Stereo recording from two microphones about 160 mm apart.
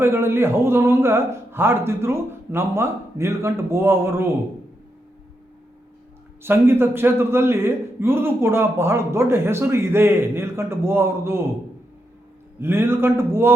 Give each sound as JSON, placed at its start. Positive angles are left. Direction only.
{"t": 0.0, "sound": "a man's voice", "side_deg": -15}
{"t": 6.4, "sound": "a man's voice", "side_deg": -15}
{"t": 12.5, "sound": "a man's voice", "side_deg": -15}